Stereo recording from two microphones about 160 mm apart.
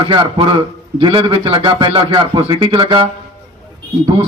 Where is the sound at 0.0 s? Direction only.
30° right (ahead or behind).